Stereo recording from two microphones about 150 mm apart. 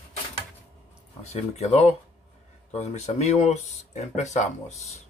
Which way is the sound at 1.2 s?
50° left (ahead or behind).